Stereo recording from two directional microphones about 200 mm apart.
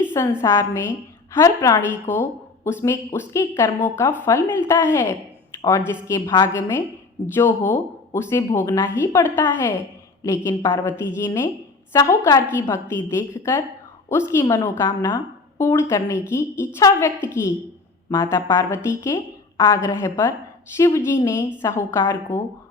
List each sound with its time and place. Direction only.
0.0 s a sound: 10° left (ahead or behind)
0.4 s a woman's voice: 15° left (ahead or behind)
2.1 s speech: 40° left (ahead or behind)
2.6 s a woman's voice: 10° left (ahead or behind)
5.6 s a woman's voice: 15° left (ahead or behind)